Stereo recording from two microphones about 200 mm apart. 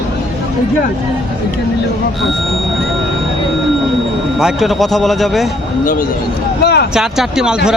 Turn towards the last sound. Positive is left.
turn(degrees=0)  # may be behind; listen again after turning